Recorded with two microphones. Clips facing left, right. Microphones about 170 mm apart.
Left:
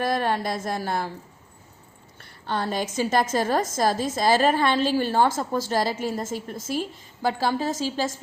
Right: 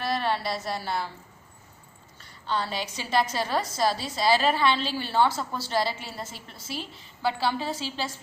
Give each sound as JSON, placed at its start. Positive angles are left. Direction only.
{"t": 0.0, "sound": "a woman's voice", "side_deg": 45}
{"t": 2.5, "sound": "a woman's voice", "side_deg": 50}